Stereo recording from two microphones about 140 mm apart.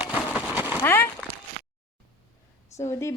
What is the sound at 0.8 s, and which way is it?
Speech, 15° left (ahead or behind).